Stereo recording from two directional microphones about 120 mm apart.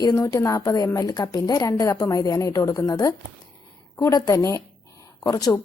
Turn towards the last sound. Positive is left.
turn(degrees=30)  # may be behind; listen again after turning